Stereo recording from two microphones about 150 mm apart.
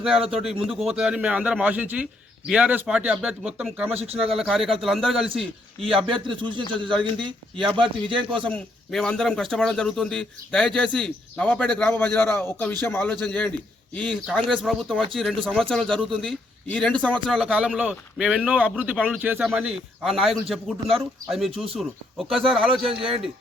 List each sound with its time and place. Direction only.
0.0 s a man's voice: 5° right (ahead or behind)
3.9 s speech: 40° right (ahead or behind)
4.3 s a man's voice: centre (ahead or behind)
6.1 s speech: 35° right (ahead or behind)
8.4 s a man's voice: 5° left (ahead or behind)